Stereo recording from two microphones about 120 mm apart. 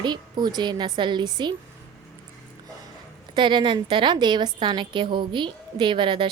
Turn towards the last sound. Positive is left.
turn(degrees=-40)  # may be behind; listen again after turning